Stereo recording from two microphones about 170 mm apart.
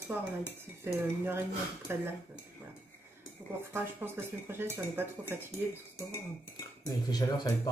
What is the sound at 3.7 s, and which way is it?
A woman's voice, 15° right (ahead or behind).